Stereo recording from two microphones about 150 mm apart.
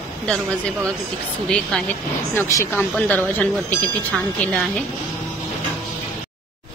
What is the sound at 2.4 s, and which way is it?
Speech, 20° left (ahead or behind).